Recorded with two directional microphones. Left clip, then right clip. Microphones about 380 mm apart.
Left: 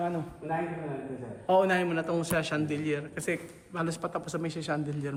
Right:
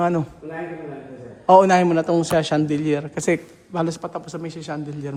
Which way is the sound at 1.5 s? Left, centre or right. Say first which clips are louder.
Right 12 dB; centre.